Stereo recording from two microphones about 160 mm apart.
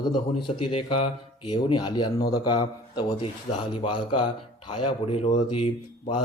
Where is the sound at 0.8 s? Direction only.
35° left (ahead or behind).